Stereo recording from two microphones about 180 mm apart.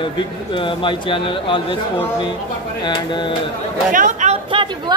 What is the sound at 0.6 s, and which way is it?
Speech, 30° left (ahead or behind).